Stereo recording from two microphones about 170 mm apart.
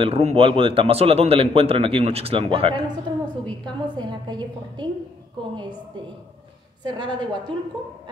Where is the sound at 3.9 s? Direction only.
25° right (ahead or behind).